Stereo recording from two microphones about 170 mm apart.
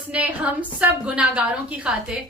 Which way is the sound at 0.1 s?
10° right (ahead or behind).